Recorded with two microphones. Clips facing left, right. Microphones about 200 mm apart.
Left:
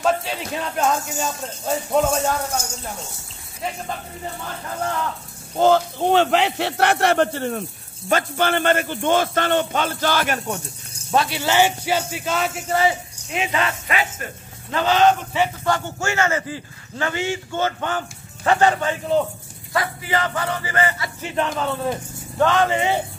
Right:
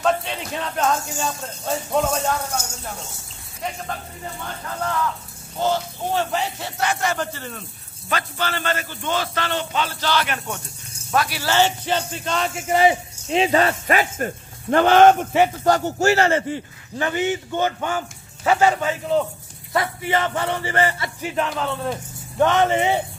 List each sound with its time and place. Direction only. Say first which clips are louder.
0.0 s music: even; 5° left (ahead or behind)
5.6 s a man's voice: left 6 dB; 60° left (ahead or behind)
11.1 s music: left 2 dB; 25° left (ahead or behind); by 12.6 s 5° left (ahead or behind)
12.6 s a sound: right 4 dB; 20° right (ahead or behind)
13.3 s speech: right 6 dB; 35° right (ahead or behind)
17.0 s speech: right 2 dB; 20° right (ahead or behind)
20.1 s a sound: right 2 dB; 25° right (ahead or behind)
21.2 s speech: left 1 dB; 5° right (ahead or behind)
22.4 s a sound: right 1 dB; 20° right (ahead or behind)